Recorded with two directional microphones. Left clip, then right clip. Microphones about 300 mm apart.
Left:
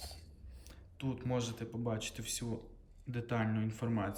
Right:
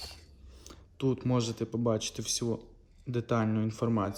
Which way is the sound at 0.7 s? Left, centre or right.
Centre.